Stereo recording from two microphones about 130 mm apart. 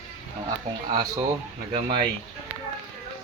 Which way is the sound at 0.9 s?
30° right (ahead or behind).